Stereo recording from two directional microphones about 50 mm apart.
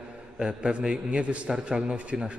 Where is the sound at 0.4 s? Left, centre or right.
Centre.